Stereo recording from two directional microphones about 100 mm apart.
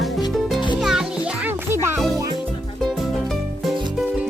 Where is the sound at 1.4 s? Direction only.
25° right (ahead or behind).